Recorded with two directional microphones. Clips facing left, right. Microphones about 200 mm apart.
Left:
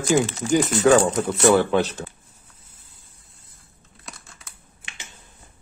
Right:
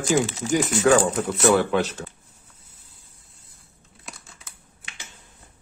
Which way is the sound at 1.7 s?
30° left (ahead or behind).